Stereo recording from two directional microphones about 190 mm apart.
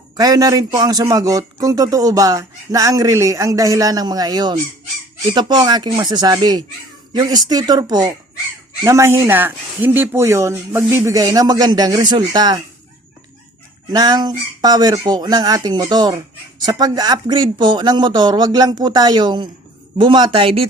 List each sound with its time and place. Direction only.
0.2 s a man's voice: 20° right (ahead or behind)
13.9 s a man's voice: 20° right (ahead or behind)